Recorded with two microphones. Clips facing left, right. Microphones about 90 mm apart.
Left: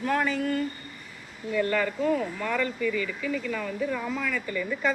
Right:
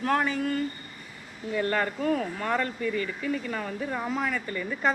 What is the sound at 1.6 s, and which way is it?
Speech, 40° right (ahead or behind).